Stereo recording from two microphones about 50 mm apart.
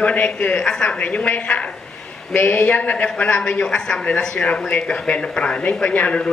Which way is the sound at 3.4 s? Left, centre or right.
Centre.